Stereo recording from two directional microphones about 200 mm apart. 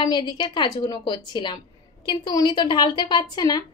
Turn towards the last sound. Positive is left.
turn(degrees=20)  # may be behind; listen again after turning